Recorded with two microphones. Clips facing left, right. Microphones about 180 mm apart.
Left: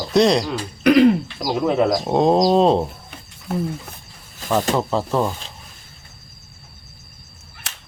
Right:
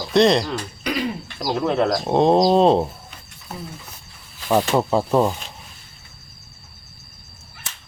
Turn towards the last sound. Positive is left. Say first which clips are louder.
# left 2 dB
turn(degrees=70)  # may be behind; listen again after turning